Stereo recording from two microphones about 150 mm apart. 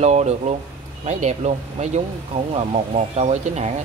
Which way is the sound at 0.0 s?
50° right (ahead or behind).